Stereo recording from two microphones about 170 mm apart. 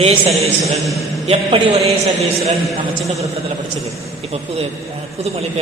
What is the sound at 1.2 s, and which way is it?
A man's voice, 30° right (ahead or behind).